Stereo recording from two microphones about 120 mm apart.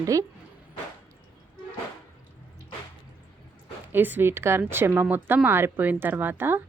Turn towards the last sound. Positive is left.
turn(degrees=-15)  # may be behind; listen again after turning